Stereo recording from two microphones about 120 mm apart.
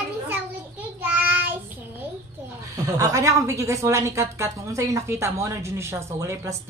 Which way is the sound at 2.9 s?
30° right (ahead or behind).